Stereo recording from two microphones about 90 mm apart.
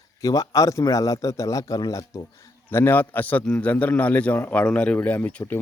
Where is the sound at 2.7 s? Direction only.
25° left (ahead or behind).